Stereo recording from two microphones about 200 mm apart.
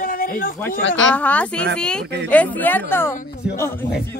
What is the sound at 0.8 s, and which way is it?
Speech, 70° left (ahead or behind).